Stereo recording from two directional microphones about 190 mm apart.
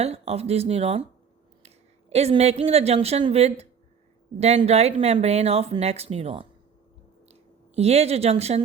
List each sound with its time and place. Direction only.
0.0 s speech: 35° right (ahead or behind)
7.8 s speech: 35° right (ahead or behind)